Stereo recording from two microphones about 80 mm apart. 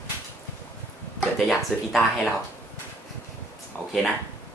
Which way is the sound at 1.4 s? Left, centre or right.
Centre.